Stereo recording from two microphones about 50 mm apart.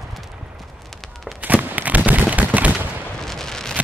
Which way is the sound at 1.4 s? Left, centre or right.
Right.